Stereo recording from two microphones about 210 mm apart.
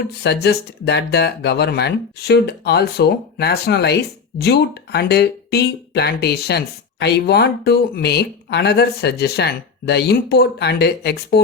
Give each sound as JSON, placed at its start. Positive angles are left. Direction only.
{"t": 0.2, "sound": "speech", "side_deg": 50}